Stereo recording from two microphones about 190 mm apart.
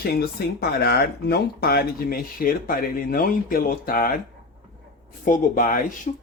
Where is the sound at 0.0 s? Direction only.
55° left (ahead or behind).